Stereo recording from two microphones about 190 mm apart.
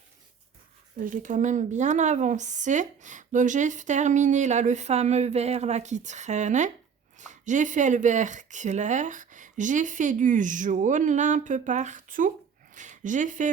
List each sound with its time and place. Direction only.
0.9 s a woman's voice: 45° right (ahead or behind)